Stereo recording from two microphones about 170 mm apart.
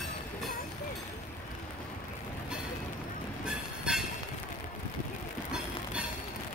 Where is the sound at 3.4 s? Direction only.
5° right (ahead or behind).